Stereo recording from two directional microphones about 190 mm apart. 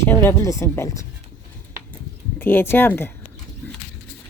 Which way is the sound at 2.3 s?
10° left (ahead or behind).